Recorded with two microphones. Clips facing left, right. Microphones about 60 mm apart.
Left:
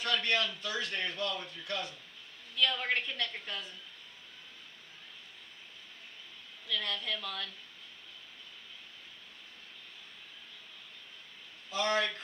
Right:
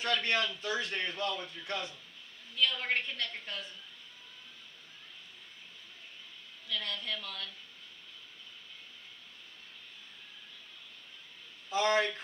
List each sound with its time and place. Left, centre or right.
0.0 s a man's voice: right
2.9 s a woman's voice: centre
6.7 s a woman's voice: centre
11.7 s a man's voice: right